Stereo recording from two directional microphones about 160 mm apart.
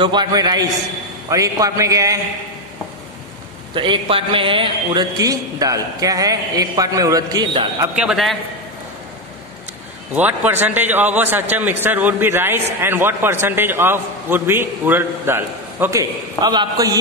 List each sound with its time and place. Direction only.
0.0 s a man's voice: 30° right (ahead or behind)
3.7 s a man's voice: 30° right (ahead or behind)
5.1 s a man's voice: 20° right (ahead or behind)
7.9 s a man's voice: 5° right (ahead or behind)
10.1 s a man's voice: 10° right (ahead or behind)